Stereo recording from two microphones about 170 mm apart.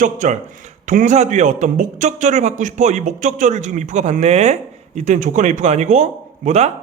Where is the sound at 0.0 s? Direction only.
45° right (ahead or behind).